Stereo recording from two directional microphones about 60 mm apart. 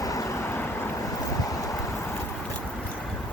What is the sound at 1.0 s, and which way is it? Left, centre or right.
Boat, left.